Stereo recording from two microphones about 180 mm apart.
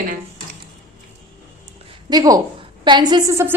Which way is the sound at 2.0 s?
20° right (ahead or behind).